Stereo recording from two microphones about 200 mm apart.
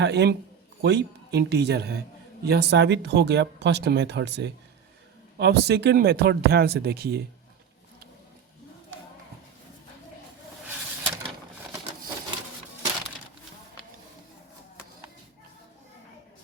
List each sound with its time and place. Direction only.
0.0 s speech: 55° right (ahead or behind)